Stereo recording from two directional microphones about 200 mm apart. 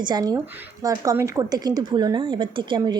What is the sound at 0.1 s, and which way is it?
Speech, 20° right (ahead or behind).